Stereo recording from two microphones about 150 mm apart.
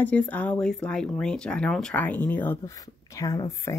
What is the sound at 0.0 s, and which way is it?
Speech, 10° left (ahead or behind).